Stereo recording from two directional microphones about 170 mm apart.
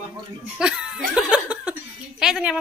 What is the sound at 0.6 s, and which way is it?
Speech, 5° right (ahead or behind).